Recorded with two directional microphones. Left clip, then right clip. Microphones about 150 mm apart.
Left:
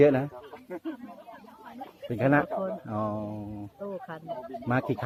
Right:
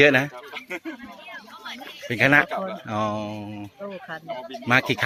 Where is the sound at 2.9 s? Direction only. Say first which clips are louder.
Right 6 dB; 35° right (ahead or behind).